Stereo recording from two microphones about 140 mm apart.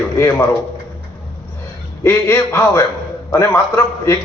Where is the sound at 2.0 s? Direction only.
20° left (ahead or behind).